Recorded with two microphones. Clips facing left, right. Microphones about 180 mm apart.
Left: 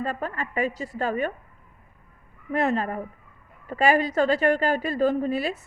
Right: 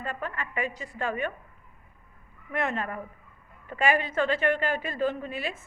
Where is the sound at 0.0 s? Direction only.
35° left (ahead or behind).